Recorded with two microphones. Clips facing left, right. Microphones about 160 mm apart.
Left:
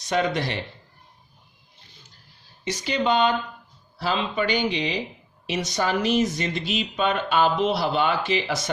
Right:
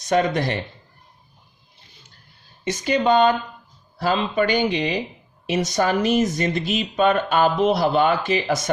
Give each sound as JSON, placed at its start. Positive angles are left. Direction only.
{"t": 0.1, "sound": "speech", "side_deg": -50}
{"t": 2.6, "sound": "speech", "side_deg": -45}